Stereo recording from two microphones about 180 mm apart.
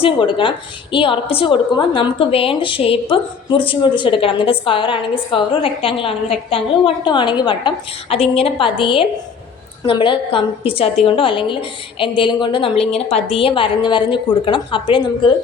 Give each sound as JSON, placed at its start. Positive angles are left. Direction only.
{"t": 0.0, "sound": "a woman's voice", "side_deg": 25}